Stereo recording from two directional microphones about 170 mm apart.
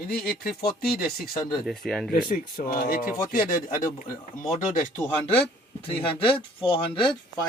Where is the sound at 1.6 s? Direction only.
Centre (ahead or behind).